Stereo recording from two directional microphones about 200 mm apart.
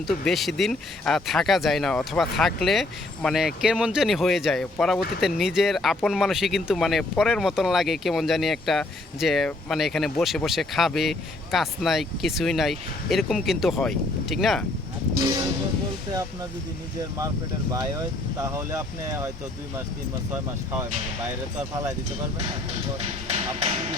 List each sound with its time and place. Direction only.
0.1 s speech: centre (ahead or behind)
15.2 s vehicle: 20° right (ahead or behind)
17.0 s speech: 15° right (ahead or behind)
23.0 s speech: 30° right (ahead or behind)